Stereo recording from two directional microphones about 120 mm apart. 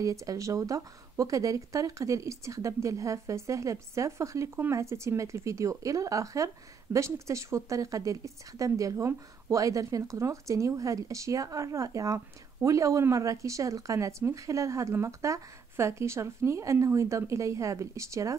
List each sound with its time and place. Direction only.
0.0 s speech: 25° right (ahead or behind)